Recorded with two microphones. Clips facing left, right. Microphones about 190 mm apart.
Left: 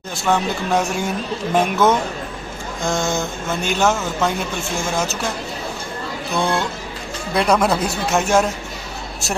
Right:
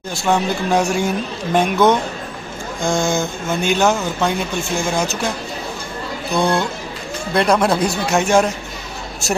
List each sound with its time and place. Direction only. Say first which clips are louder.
0.1 s speech: right 2 dB; centre (ahead or behind)
6.3 s speech: right 3 dB; centre (ahead or behind)